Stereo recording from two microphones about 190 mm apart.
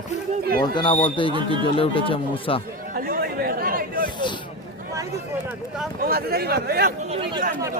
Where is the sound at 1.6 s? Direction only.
30° left (ahead or behind).